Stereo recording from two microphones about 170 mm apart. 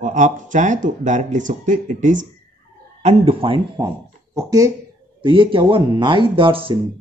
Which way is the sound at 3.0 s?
35° right (ahead or behind).